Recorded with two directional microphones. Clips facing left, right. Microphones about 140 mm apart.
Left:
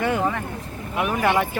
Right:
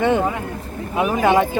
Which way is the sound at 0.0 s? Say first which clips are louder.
Right 4 dB; 20° right (ahead or behind).